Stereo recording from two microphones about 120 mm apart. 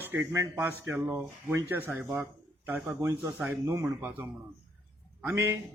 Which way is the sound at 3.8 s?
20° right (ahead or behind).